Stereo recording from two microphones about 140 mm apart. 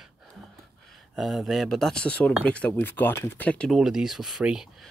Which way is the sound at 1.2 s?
Centre (ahead or behind).